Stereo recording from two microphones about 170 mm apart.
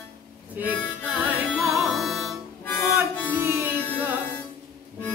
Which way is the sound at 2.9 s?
15° left (ahead or behind).